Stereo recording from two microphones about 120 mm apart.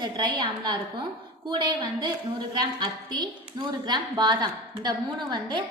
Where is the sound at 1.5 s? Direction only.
40° right (ahead or behind).